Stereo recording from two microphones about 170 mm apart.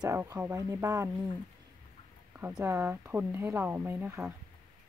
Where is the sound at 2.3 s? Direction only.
10° right (ahead or behind).